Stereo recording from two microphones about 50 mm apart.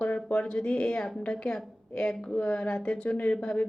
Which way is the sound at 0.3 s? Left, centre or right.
Centre.